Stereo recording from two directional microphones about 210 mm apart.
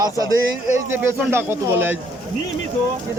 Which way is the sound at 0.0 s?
15° right (ahead or behind).